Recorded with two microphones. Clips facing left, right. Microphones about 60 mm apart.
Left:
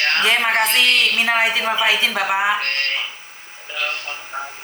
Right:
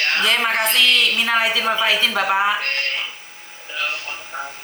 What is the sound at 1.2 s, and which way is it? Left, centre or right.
Speech, left.